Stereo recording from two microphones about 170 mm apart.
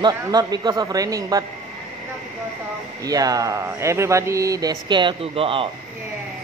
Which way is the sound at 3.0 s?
20° right (ahead or behind).